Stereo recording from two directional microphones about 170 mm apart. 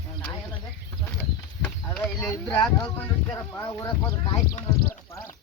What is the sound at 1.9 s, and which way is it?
Speech, 5° left (ahead or behind).